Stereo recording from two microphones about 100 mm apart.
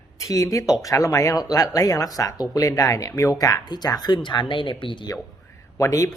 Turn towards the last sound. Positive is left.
turn(degrees=35)  # may be behind; listen again after turning